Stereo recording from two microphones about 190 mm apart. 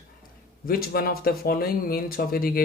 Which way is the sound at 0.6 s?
50° left (ahead or behind).